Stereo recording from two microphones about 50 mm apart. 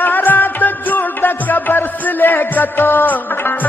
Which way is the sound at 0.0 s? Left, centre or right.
Left.